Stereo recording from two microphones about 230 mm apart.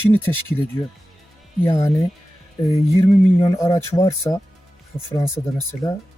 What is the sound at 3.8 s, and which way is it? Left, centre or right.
Speech, centre.